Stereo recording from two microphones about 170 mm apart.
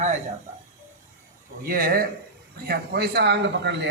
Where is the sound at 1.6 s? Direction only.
60° right (ahead or behind).